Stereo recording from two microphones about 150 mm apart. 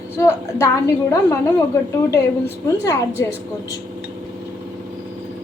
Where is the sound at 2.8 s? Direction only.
20° left (ahead or behind).